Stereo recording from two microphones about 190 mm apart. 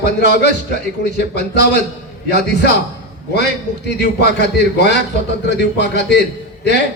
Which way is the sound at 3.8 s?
60° left (ahead or behind).